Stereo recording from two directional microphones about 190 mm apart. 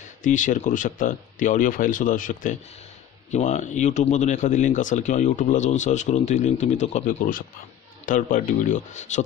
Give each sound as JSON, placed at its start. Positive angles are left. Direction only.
{"t": 0.2, "sound": "speech", "side_deg": 40}